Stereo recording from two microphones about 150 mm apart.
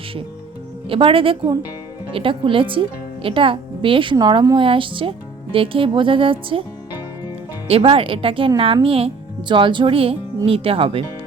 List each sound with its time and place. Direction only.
0.9 s a woman's voice: 35° right (ahead or behind)
7.7 s a woman's voice: 40° right (ahead or behind)